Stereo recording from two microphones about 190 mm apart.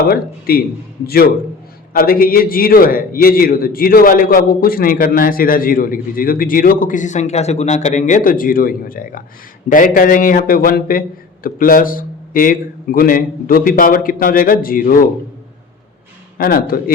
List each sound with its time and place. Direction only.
0.0 s a man's voice: 55° left (ahead or behind)
16.4 s a man's voice: 50° left (ahead or behind)